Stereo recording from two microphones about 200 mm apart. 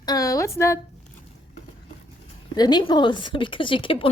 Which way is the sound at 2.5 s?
20° left (ahead or behind).